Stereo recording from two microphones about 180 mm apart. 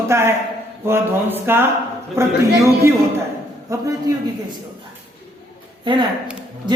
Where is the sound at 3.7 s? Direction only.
20° right (ahead or behind).